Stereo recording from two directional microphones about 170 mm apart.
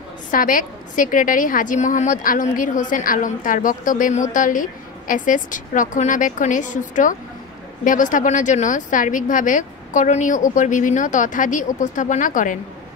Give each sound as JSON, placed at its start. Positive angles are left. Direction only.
{"t": 0.3, "sound": "a woman's voice", "side_deg": 55}